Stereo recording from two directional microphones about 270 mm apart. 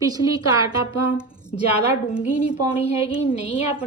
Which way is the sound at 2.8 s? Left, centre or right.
Left.